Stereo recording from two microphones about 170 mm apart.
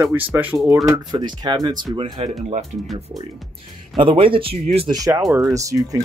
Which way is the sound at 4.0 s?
30° right (ahead or behind).